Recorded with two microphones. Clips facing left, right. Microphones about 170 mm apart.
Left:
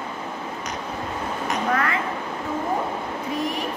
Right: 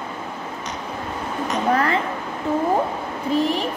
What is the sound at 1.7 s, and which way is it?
Speech, 30° right (ahead or behind).